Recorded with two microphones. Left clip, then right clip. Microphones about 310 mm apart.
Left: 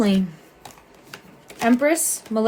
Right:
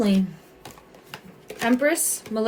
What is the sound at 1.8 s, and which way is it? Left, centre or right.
Speech, centre.